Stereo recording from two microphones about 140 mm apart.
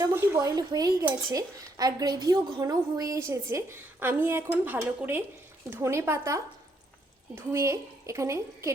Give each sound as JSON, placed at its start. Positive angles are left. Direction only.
{"t": 0.0, "sound": "speech", "side_deg": -15}